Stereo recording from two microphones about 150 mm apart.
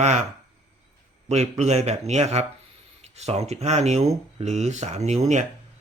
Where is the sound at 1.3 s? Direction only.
50° right (ahead or behind).